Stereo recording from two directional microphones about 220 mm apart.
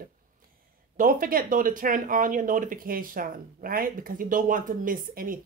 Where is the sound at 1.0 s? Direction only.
40° right (ahead or behind).